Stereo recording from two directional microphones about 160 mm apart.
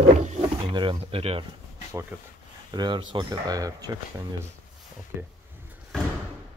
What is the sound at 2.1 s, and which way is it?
Speech, 10° right (ahead or behind).